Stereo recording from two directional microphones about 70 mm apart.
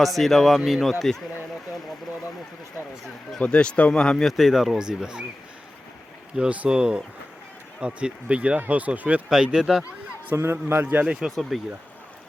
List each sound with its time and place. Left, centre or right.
0.0 s speech: centre
3.4 s speech: centre
4.3 s speech: centre
6.3 s speech: centre
9.3 s speech: centre
10.3 s a man's voice: right
11.0 s speech: centre
11.3 s speech: centre